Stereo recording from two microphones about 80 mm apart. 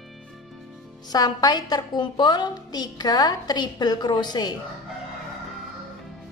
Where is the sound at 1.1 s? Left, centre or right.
Left.